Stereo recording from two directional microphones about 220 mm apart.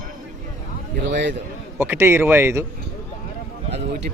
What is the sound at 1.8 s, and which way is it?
Speech, 10° right (ahead or behind).